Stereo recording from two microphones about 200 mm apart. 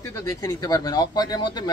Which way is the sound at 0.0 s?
15° left (ahead or behind).